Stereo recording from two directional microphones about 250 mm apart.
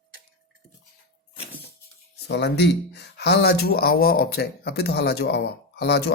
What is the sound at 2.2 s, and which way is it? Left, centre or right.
Speech, left.